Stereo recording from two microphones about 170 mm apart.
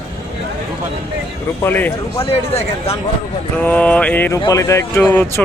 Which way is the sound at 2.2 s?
35° left (ahead or behind).